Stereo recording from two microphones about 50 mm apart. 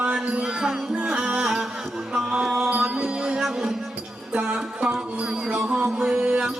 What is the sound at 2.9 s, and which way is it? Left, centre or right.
Music, centre.